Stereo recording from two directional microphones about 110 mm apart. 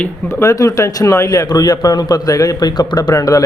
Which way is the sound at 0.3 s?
25° left (ahead or behind).